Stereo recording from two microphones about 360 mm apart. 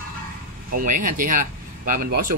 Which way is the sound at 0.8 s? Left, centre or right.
Right.